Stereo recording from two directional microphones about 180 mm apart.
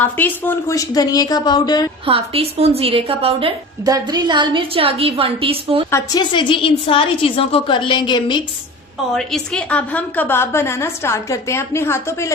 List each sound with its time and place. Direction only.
0.0 s a woman's voice: 10° left (ahead or behind)
2.0 s a woman's voice: 30° right (ahead or behind)
3.8 s a woman's voice: 20° right (ahead or behind)
5.9 s a woman's voice: 25° left (ahead or behind)
9.1 s a woman's voice: 5° left (ahead or behind)